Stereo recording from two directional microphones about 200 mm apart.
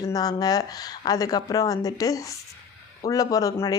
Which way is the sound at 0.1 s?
20° left (ahead or behind).